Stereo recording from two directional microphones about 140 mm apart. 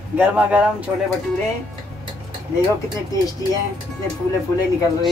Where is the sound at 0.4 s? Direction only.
10° right (ahead or behind).